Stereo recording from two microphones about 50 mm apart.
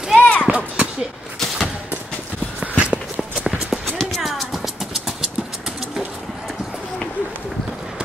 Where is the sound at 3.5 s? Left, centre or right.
Centre.